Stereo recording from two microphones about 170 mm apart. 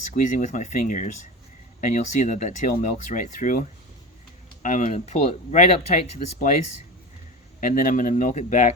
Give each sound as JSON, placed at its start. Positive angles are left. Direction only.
{"t": 0.0, "sound": "speech", "side_deg": 45}
{"t": 7.6, "sound": "speech", "side_deg": 50}